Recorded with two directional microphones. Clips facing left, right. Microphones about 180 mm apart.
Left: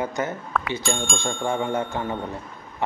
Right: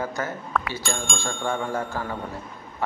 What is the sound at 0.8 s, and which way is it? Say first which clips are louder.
Speech: left 3 dB; centre (ahead or behind).